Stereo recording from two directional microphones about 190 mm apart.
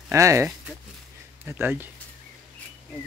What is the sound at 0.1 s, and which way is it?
Speech, 15° right (ahead or behind).